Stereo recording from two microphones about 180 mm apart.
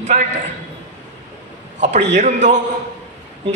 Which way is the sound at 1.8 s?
40° right (ahead or behind).